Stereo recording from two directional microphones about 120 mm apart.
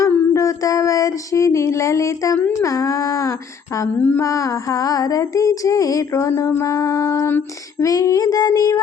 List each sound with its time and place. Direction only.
0.3 s female singing: 25° left (ahead or behind)
3.9 s mantra: 15° left (ahead or behind)
4.2 s female singing: 25° left (ahead or behind)